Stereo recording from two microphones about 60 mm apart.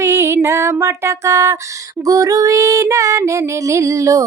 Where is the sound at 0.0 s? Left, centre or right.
Right.